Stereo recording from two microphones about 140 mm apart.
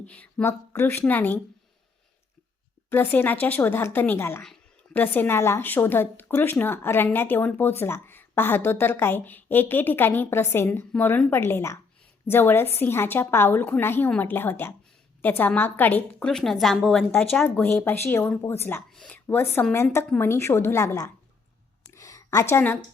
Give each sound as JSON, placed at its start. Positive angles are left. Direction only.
{"t": 0.0, "sound": "a woman's voice", "side_deg": 10}
{"t": 2.9, "sound": "a woman's voice", "side_deg": 15}
{"t": 17.3, "sound": "a woman's voice", "side_deg": 15}
{"t": 18.9, "sound": "a woman's voice", "side_deg": 5}
{"t": 21.9, "sound": "a sound", "side_deg": 25}